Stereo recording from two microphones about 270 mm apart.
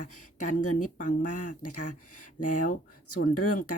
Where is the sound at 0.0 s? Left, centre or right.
Left.